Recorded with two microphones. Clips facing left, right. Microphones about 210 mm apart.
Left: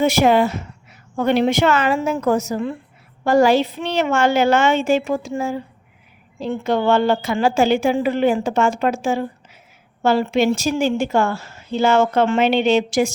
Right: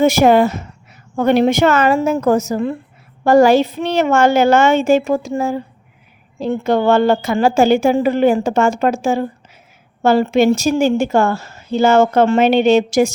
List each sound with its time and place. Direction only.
0.0 s a woman's voice: 45° right (ahead or behind)